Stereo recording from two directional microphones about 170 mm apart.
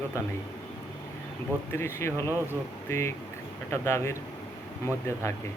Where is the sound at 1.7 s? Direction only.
15° left (ahead or behind).